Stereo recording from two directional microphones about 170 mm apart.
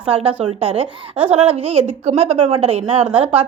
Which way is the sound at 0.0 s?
30° right (ahead or behind).